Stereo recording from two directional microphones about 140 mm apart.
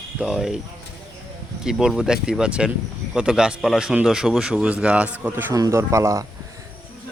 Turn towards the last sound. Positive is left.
turn(degrees=-20)  # may be behind; listen again after turning